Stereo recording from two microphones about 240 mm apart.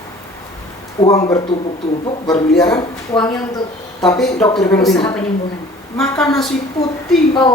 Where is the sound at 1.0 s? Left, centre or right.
Left.